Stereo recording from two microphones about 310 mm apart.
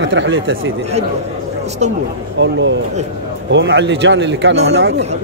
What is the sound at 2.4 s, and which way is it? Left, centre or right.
A man's voice, right.